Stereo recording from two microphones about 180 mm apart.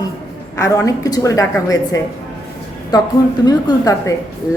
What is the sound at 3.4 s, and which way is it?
Speech, 20° left (ahead or behind).